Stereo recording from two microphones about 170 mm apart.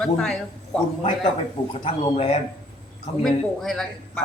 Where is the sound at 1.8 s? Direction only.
35° left (ahead or behind).